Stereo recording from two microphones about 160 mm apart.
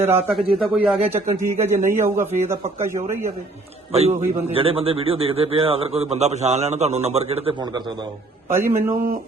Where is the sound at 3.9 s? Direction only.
40° right (ahead or behind).